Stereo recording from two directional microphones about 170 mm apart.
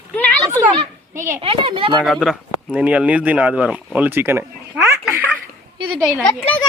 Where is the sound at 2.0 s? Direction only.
Centre (ahead or behind).